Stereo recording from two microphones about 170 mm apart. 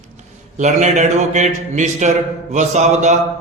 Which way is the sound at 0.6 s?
45° right (ahead or behind).